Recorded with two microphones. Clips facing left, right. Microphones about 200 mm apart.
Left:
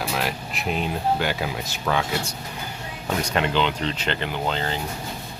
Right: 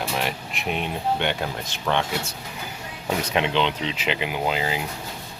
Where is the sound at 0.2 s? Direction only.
Centre (ahead or behind).